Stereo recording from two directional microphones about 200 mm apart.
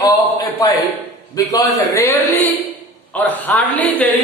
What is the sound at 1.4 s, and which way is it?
A man's voice, 15° left (ahead or behind).